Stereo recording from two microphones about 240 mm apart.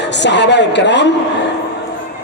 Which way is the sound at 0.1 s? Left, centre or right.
Left.